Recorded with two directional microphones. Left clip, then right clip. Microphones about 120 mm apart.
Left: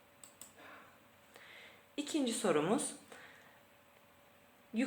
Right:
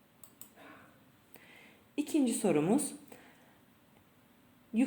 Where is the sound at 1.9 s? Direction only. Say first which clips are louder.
Right 5 dB; 40° right (ahead or behind).